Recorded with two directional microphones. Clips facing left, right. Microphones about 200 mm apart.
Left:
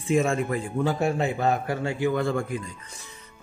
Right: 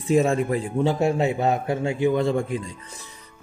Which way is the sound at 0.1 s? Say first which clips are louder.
Right 3 dB; 35° right (ahead or behind).